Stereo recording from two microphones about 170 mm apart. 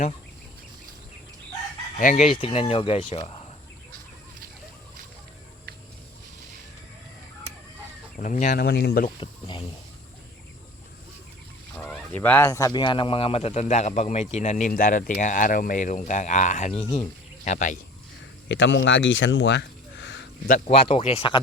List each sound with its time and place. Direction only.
2.0 s speech: 45° left (ahead or behind); by 3.4 s 30° left (ahead or behind)
8.1 s speech: 50° left (ahead or behind)
8.6 s speech: 70° left (ahead or behind)
9.0 s speech: 30° left (ahead or behind)
11.8 s speech: 10° left (ahead or behind); by 17.7 s 45° left (ahead or behind)
18.4 s speech: 90° left
20.7 s speech: 35° left (ahead or behind)